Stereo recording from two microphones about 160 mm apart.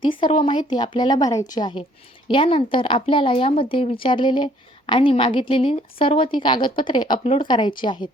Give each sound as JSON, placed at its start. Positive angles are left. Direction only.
{"t": 0.0, "sound": "a woman's voice", "side_deg": 30}